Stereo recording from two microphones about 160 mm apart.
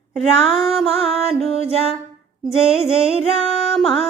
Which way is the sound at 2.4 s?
5° right (ahead or behind).